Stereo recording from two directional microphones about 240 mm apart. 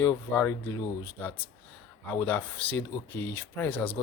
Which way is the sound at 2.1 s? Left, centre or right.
Centre.